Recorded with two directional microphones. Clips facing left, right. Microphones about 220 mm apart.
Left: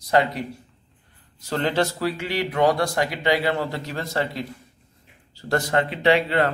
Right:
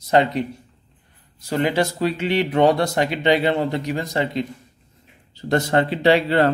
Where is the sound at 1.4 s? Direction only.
10° right (ahead or behind).